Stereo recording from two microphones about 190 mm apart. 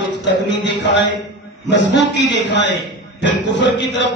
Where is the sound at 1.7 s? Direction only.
70° left (ahead or behind).